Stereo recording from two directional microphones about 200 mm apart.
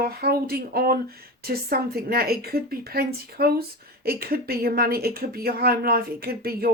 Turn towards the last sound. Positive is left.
turn(degrees=-50)  # may be behind; listen again after turning